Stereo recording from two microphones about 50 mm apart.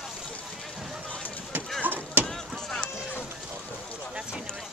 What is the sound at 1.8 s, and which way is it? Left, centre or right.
Vehicle, right.